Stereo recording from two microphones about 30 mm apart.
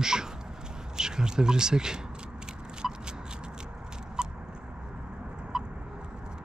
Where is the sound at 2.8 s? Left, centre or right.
Centre.